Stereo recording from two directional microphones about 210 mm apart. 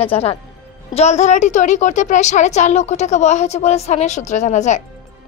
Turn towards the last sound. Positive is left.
turn(degrees=35)  # may be behind; listen again after turning